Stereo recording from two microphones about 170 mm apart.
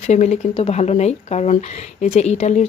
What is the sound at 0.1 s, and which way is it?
Speech, 40° left (ahead or behind).